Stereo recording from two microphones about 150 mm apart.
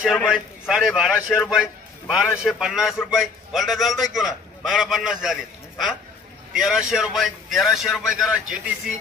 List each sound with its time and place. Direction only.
0.2 s a man's voice: 5° right (ahead or behind)